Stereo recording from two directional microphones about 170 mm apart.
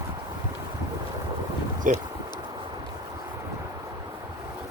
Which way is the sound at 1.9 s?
50° right (ahead or behind).